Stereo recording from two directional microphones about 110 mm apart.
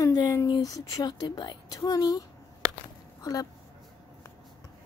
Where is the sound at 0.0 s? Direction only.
35° left (ahead or behind).